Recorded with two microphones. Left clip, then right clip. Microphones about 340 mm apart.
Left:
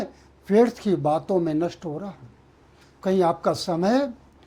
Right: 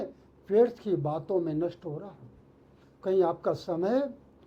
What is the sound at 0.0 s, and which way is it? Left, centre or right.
Speech, left.